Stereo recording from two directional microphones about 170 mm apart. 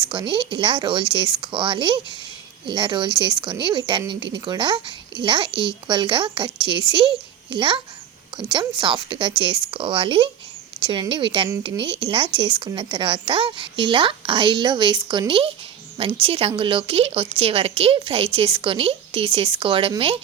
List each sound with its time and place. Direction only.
0.1 s a woman's voice: 30° right (ahead or behind)
8.8 s a woman's voice: 30° right (ahead or behind)